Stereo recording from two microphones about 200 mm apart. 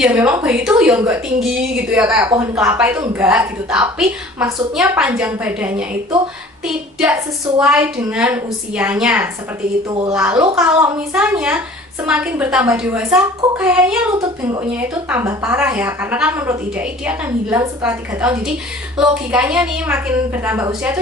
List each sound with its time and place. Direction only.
0.0 s a woman's voice: 5° right (ahead or behind)
7.0 s a woman's voice: 5° right (ahead or behind)
9.8 s speech: 20° right (ahead or behind)
10.1 s a woman's voice: 5° right (ahead or behind)
13.4 s speech: 25° right (ahead or behind)
14.5 s a woman's voice: 10° right (ahead or behind)